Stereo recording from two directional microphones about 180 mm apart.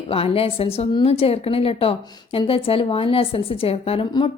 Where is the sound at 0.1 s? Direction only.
30° left (ahead or behind).